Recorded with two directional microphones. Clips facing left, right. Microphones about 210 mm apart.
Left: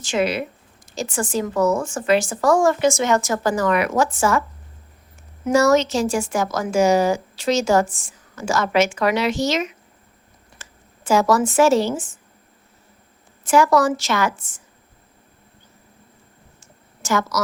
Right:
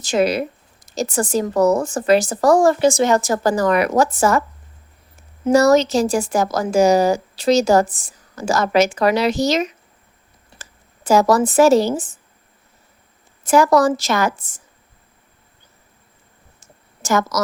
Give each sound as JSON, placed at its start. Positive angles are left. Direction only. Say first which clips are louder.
{"t": 0.0, "sound": "speech", "louder": "right 4 dB", "side_deg": -40}
{"t": 5.5, "sound": "speech", "louder": "right 3 dB", "side_deg": -35}
{"t": 13.4, "sound": "speech", "louder": "right 2 dB", "side_deg": -40}
{"t": 17.0, "sound": "a woman's voice", "louder": "right 3 dB", "side_deg": -40}